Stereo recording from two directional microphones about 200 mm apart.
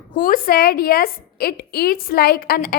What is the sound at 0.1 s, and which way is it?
A woman's voice, 45° left (ahead or behind).